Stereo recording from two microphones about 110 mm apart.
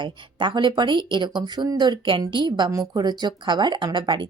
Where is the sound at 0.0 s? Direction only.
45° right (ahead or behind).